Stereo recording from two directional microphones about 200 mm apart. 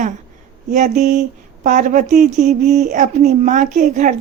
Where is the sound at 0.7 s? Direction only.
40° right (ahead or behind).